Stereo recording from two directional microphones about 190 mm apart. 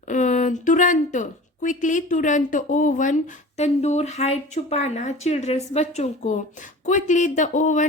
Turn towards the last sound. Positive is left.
turn(degrees=40)  # may be behind; listen again after turning